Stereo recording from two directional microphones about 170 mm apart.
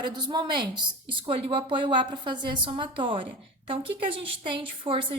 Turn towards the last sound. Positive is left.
turn(degrees=-30)  # may be behind; listen again after turning